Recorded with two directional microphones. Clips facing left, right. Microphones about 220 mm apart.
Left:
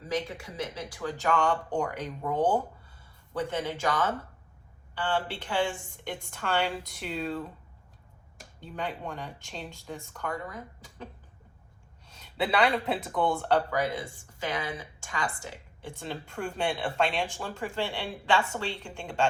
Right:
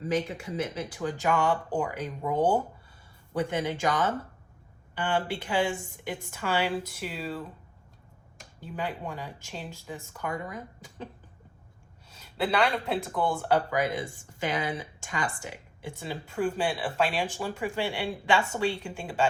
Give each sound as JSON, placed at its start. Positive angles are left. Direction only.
{"t": 0.9, "sound": "speech", "side_deg": -20}
{"t": 8.6, "sound": "speech", "side_deg": -5}
{"t": 12.0, "sound": "speech", "side_deg": -5}
{"t": 13.7, "sound": "speech", "side_deg": -15}
{"t": 15.8, "sound": "speech", "side_deg": -5}